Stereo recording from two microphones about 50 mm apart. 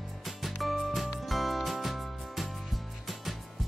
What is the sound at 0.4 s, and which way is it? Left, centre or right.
Music, centre.